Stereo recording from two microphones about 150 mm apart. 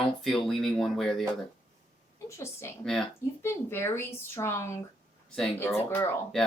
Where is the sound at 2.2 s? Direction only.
20° left (ahead or behind).